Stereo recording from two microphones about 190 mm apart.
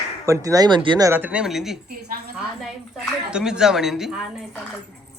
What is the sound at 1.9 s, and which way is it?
Speech, 55° right (ahead or behind).